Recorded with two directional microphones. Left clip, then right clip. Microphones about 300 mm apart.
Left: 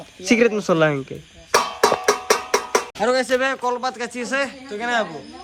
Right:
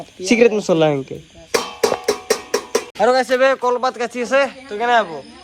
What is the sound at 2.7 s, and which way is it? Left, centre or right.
Speech, centre.